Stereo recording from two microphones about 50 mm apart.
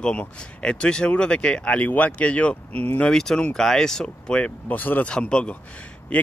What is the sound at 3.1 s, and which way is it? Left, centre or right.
Speech, centre.